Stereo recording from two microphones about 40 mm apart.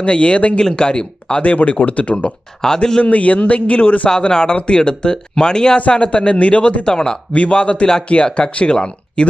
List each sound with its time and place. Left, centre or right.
0.0 s speech: left
0.7 s speech: left
1.4 s a man's voice: left
2.6 s a man's voice: centre
3.0 s a man's voice: left
4.1 s speech: centre
5.8 s speech: left
7.3 s speech: left